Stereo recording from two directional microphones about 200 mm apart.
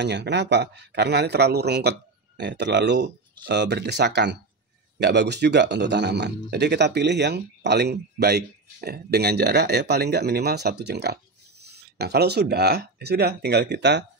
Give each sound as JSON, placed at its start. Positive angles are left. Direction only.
{"t": 0.0, "sound": "speech", "side_deg": -60}